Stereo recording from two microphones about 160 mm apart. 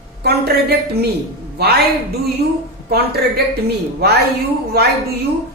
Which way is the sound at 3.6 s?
85° right.